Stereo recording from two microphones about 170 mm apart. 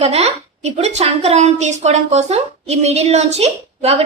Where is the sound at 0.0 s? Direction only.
40° right (ahead or behind).